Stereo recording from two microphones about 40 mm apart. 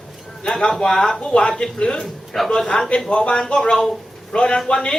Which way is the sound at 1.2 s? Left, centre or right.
Left.